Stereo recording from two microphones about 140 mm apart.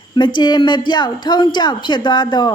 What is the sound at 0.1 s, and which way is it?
A woman's voice, 35° left (ahead or behind).